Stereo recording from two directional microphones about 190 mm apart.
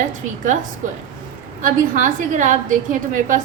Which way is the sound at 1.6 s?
45° right (ahead or behind).